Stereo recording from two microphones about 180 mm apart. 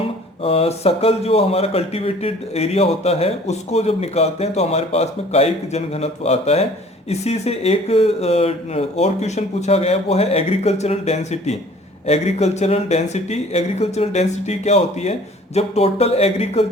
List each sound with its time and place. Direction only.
0.4 s speech: 35° left (ahead or behind)